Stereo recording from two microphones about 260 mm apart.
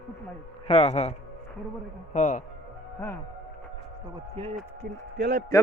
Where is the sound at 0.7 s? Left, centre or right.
Left.